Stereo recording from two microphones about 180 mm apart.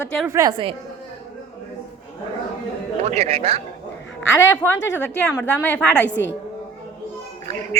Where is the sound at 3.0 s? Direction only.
35° right (ahead or behind).